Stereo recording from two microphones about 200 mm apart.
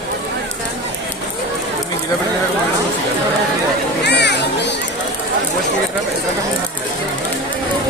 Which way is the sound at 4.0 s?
60° left (ahead or behind).